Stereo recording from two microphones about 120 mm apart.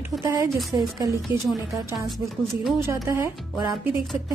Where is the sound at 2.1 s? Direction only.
Centre (ahead or behind).